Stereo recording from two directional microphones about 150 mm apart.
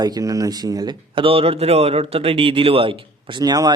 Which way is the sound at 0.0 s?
25° right (ahead or behind).